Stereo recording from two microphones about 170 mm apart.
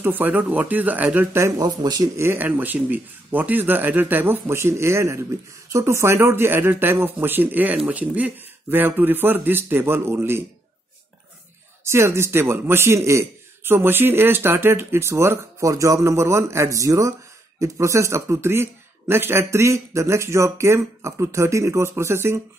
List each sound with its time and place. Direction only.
0.0 s a man's voice: 10° right (ahead or behind)
11.8 s a man's voice: 15° right (ahead or behind)